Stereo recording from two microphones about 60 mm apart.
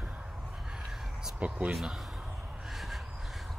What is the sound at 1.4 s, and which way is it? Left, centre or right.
Speech, right.